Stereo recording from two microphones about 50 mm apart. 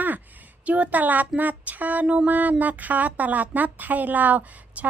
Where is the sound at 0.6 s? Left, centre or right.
Right.